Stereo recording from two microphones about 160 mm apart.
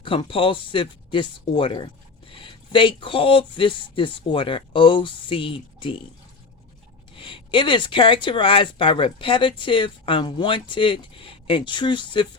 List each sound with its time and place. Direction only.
0.0 s speech: 35° left (ahead or behind)
7.2 s speech: 30° left (ahead or behind)